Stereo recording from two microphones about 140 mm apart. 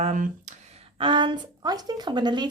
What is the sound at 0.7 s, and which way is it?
A woman's voice, 35° right (ahead or behind).